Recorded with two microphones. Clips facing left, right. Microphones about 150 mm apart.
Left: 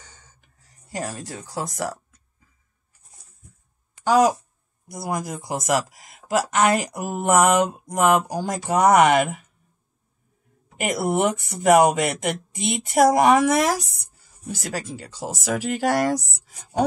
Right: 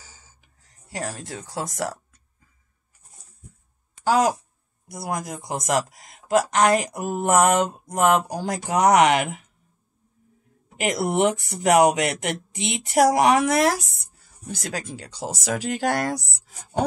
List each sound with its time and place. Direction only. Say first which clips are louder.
0.0 s a sound: left 1 dB; 5° right (ahead or behind)
0.9 s speech: left 1 dB; 5° left (ahead or behind)
4.0 s a woman's voice: left 2 dB; 5° right (ahead or behind)
10.9 s speech: even; centre (ahead or behind)